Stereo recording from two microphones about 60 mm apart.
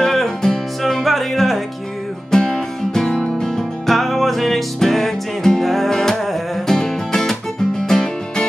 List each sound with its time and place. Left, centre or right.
0.0 s music: centre